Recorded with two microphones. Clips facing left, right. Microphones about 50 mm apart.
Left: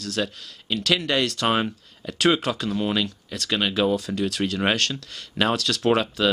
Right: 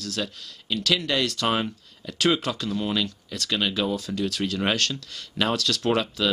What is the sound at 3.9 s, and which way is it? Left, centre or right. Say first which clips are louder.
Speech: left 3 dB; centre.